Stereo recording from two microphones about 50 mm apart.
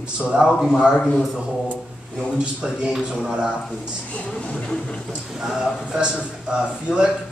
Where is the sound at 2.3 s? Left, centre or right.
Centre.